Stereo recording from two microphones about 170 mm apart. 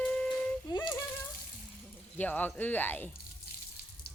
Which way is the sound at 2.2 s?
10° left (ahead or behind).